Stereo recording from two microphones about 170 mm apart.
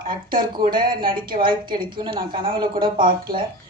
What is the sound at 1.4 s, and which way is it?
A woman's voice, 30° right (ahead or behind).